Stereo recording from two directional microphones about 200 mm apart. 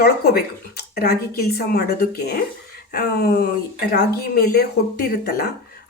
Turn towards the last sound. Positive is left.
turn(degrees=50)  # may be behind; listen again after turning